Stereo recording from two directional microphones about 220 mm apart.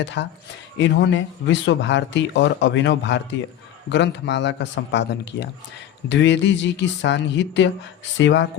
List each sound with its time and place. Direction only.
0.0 s speech: 55° left (ahead or behind)